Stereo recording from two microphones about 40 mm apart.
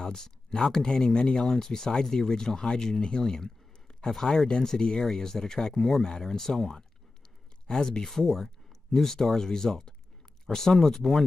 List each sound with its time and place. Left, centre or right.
0.0 s speech: centre